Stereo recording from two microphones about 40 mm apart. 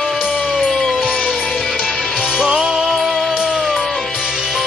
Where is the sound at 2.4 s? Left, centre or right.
Right.